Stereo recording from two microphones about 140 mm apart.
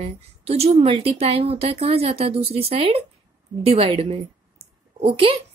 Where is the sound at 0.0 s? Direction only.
45° right (ahead or behind).